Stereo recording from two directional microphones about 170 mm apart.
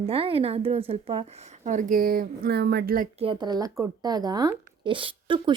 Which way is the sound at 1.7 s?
50° right (ahead or behind).